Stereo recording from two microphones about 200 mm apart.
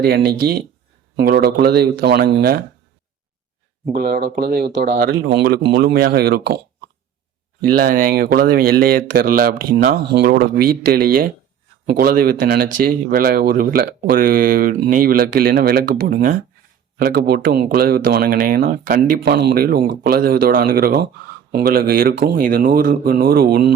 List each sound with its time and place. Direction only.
0.0 s speech: 50° right (ahead or behind)
3.9 s speech: 45° right (ahead or behind)